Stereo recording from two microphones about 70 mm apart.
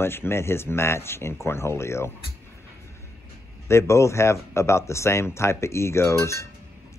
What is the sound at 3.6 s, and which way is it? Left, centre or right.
Speech, left.